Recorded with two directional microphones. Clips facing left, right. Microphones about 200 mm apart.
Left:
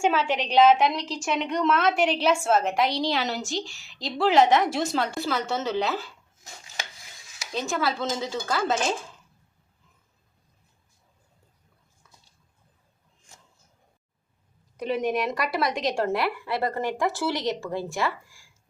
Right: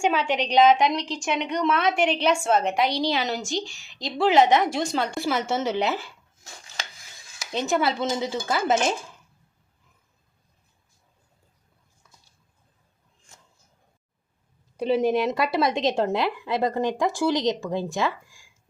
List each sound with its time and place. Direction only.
0.0 s a woman's voice: centre (ahead or behind)
5.2 s speech: 15° right (ahead or behind)
7.5 s speech: 20° right (ahead or behind)
14.8 s speech: 30° right (ahead or behind)